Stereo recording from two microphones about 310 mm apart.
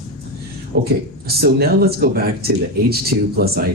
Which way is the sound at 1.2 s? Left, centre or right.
Right.